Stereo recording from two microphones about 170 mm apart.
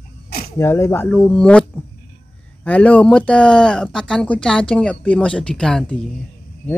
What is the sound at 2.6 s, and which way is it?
Speech, 10° left (ahead or behind).